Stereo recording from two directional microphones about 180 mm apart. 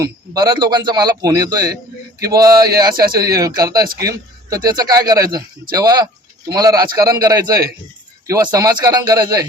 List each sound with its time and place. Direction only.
0.0 s speech: 20° right (ahead or behind)